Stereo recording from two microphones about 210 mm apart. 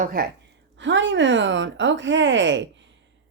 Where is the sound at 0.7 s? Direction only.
60° right (ahead or behind).